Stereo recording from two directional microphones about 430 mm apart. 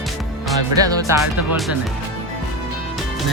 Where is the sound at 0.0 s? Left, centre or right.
Centre.